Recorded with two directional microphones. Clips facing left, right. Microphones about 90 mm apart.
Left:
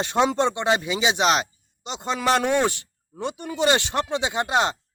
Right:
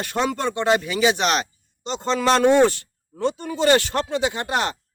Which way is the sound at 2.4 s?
15° right (ahead or behind).